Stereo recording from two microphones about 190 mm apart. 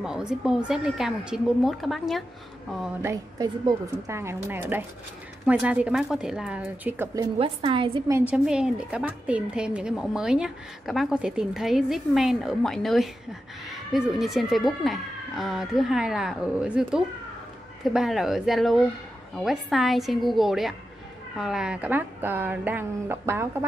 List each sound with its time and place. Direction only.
0.0 s a woman's voice: 5° right (ahead or behind)
3.0 s speech: 15° right (ahead or behind)
7.3 s a woman's voice: 30° right (ahead or behind)
8.1 s a woman's voice: 5° right (ahead or behind)